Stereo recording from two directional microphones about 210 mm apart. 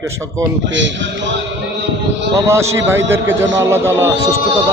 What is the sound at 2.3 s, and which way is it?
Speech, 15° right (ahead or behind).